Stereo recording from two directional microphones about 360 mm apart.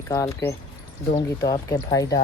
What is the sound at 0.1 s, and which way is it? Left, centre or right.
Speech, centre.